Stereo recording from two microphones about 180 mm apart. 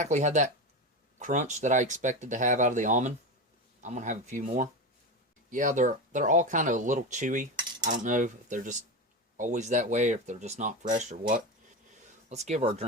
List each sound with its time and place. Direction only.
0.0 s speech: 40° right (ahead or behind)